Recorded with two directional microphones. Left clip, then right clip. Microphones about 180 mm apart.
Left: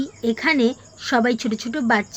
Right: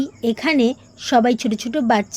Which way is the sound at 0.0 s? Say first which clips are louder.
Right 1 dB; 25° right (ahead or behind).